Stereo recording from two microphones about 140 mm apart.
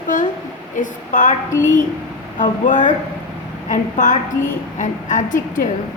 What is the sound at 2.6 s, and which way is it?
A woman's voice, 65° left (ahead or behind).